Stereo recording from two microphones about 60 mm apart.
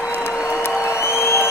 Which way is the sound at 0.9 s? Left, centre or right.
Left.